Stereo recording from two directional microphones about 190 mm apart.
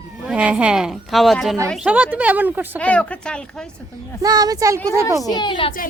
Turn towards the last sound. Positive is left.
turn(degrees=25)  # may be behind; listen again after turning